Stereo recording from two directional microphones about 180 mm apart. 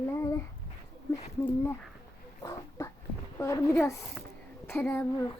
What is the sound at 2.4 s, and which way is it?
Dog, 15° left (ahead or behind).